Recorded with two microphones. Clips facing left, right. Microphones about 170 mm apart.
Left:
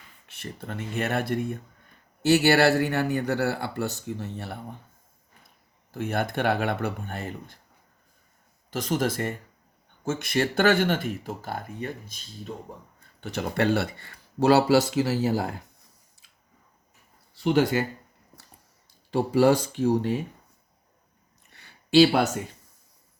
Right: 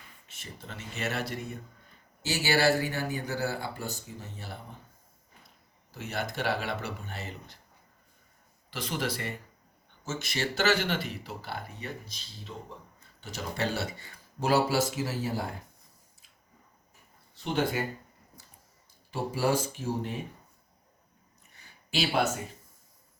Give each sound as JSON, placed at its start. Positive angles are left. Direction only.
{"t": 0.3, "sound": "a man's voice", "side_deg": 55}
{"t": 5.9, "sound": "a man's voice", "side_deg": 55}
{"t": 8.7, "sound": "speech", "side_deg": 45}
{"t": 17.4, "sound": "speech", "side_deg": 80}
{"t": 19.1, "sound": "speech", "side_deg": 70}